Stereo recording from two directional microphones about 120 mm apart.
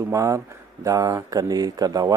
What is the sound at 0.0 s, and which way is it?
Speech, 25° right (ahead or behind).